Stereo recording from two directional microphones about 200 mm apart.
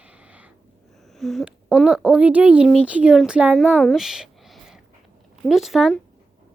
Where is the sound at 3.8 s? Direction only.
Centre (ahead or behind).